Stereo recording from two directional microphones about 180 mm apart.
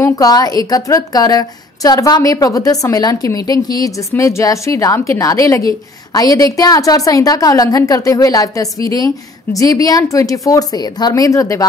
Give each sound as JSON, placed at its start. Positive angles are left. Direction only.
{"t": 0.0, "sound": "a woman's voice", "side_deg": 20}